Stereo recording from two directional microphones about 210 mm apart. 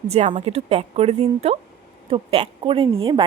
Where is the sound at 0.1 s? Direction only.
25° right (ahead or behind).